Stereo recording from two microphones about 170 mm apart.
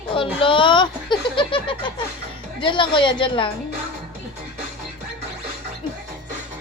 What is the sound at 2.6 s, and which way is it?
Speech, 30° left (ahead or behind).